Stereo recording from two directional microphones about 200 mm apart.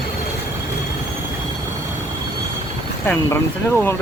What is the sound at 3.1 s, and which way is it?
Speech, 10° left (ahead or behind).